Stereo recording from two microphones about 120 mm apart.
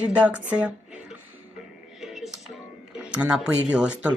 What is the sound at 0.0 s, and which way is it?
Speech, 10° right (ahead or behind).